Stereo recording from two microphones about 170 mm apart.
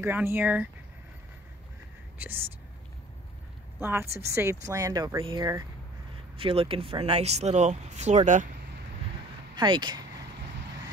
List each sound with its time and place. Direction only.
0.0 s speech: 10° right (ahead or behind)
2.1 s speech: 10° right (ahead or behind)
3.8 s speech: 15° right (ahead or behind); by 8.5 s 45° right (ahead or behind)
9.6 s speech: 25° right (ahead or behind)